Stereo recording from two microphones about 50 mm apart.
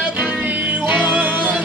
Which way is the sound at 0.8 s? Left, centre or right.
Right.